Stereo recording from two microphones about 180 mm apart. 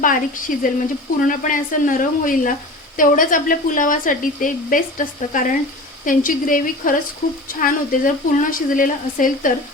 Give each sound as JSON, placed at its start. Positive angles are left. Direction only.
{"t": 0.0, "sound": "speech", "side_deg": 50}